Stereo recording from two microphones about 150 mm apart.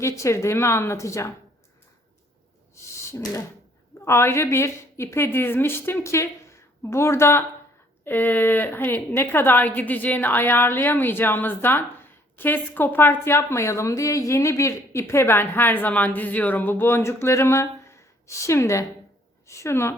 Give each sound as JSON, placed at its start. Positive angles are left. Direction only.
{"t": 0.0, "sound": "speech", "side_deg": 20}
{"t": 3.1, "sound": "a woman's voice", "side_deg": 20}